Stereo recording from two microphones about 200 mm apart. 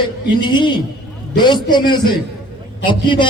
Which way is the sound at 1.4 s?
20° left (ahead or behind).